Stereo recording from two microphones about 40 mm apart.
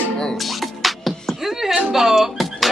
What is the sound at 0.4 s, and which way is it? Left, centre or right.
Music, centre.